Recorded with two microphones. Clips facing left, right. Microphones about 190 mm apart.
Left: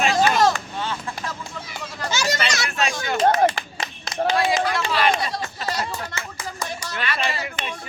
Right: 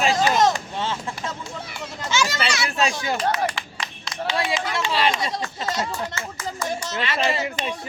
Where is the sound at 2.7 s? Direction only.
30° right (ahead or behind).